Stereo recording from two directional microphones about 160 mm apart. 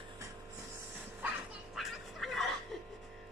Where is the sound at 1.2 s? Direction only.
Centre (ahead or behind).